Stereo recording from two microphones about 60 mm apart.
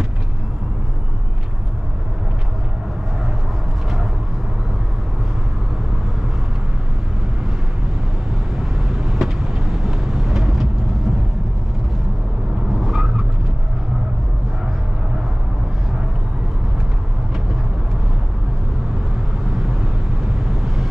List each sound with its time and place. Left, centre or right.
8.5 s vehicle: centre
12.7 s vehicle: centre
20.3 s vehicle: centre